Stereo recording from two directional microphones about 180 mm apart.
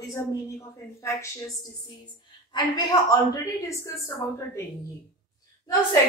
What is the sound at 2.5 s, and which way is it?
A woman's voice, 20° left (ahead or behind).